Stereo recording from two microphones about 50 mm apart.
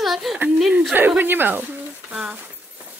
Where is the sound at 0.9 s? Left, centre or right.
Right.